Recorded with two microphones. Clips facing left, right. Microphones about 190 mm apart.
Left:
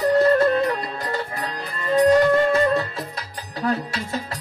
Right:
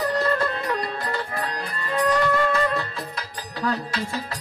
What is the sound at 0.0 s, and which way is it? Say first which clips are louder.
Music: left 7 dB; 30° left (ahead or behind).